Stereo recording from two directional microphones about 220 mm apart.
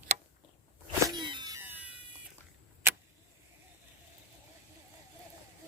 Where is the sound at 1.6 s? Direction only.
5° right (ahead or behind).